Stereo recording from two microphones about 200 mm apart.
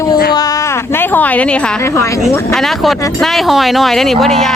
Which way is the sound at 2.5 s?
Centre (ahead or behind).